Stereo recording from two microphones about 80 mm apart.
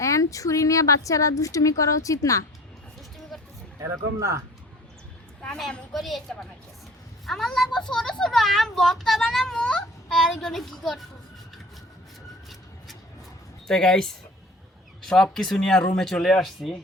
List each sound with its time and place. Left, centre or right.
0.0 s a woman's voice: left
3.8 s speech: right
5.9 s a woman's voice: centre
13.7 s speech: centre